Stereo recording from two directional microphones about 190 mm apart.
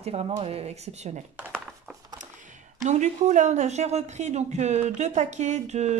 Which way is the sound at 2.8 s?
40° right (ahead or behind).